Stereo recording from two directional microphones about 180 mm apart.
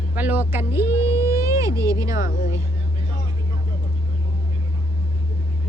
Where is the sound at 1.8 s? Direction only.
20° right (ahead or behind).